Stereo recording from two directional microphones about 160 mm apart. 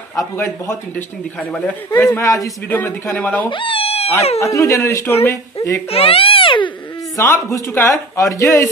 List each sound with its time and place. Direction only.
0.4 s a man's voice: 15° left (ahead or behind)
3.4 s speech: 30° left (ahead or behind)
4.4 s a man's voice: 20° left (ahead or behind)
5.9 s speech: 35° left (ahead or behind)
7.2 s a man's voice: 15° left (ahead or behind)